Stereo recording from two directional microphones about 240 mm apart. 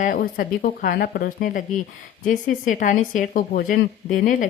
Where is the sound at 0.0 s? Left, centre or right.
Left.